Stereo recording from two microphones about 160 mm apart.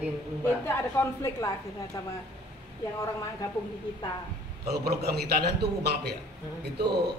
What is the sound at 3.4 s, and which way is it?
Speech, 20° left (ahead or behind).